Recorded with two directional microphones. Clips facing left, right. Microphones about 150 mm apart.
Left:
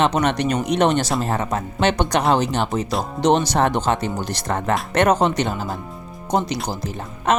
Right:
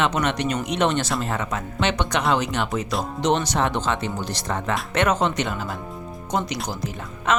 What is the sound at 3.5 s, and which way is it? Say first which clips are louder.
Speech: left 4 dB; 45° left (ahead or behind).